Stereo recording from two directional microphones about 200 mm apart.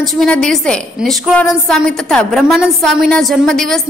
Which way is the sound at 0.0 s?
Centre (ahead or behind).